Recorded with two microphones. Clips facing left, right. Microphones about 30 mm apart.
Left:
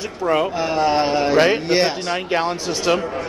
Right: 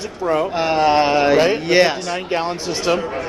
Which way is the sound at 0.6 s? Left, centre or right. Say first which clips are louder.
Right 3 dB; right.